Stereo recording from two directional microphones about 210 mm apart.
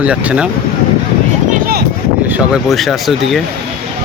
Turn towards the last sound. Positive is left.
turn(degrees=0)  # may be behind; listen again after turning